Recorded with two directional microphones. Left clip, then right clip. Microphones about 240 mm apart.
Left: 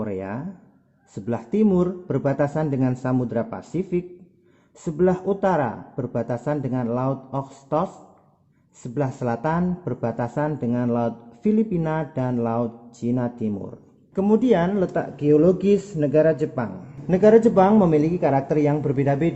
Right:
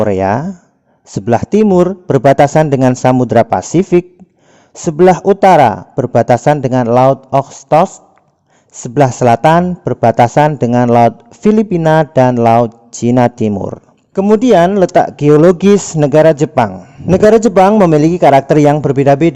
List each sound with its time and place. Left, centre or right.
0.0 s a man's voice: right